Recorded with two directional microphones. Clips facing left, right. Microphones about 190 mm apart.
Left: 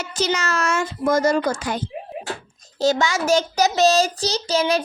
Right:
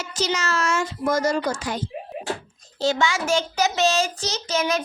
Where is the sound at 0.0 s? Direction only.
55° left (ahead or behind).